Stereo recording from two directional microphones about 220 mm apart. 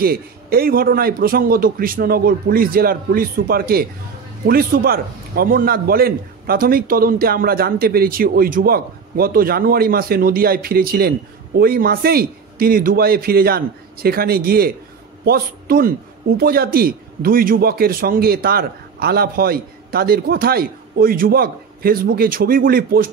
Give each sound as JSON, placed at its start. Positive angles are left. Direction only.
{"t": 0.0, "sound": "a man's voice", "side_deg": -45}